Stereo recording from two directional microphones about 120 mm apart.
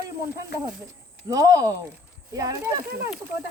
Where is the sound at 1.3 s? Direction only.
30° right (ahead or behind).